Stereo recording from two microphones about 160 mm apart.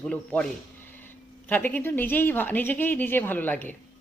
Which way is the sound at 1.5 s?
10° left (ahead or behind).